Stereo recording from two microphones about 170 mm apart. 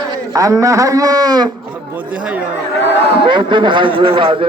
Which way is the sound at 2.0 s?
10° right (ahead or behind).